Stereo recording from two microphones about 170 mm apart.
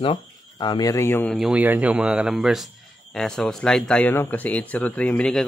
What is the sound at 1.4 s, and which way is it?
Speech, 5° right (ahead or behind).